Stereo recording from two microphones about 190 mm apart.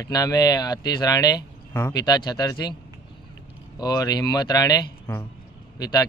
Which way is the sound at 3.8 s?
20° left (ahead or behind).